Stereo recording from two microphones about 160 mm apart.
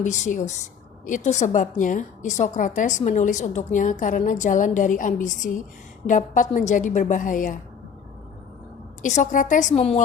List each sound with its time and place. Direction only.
0.0 s a woman's voice: 50° left (ahead or behind)
9.0 s a woman's voice: 50° left (ahead or behind)